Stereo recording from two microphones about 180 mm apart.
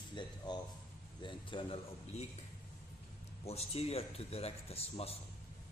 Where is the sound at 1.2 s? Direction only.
25° left (ahead or behind).